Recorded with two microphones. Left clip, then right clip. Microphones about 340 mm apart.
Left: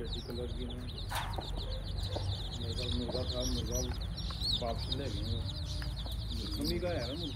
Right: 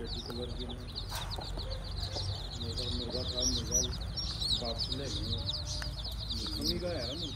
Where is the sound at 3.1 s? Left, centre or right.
Left.